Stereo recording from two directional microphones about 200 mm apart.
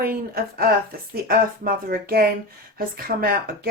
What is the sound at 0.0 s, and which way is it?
Speech, 50° right (ahead or behind).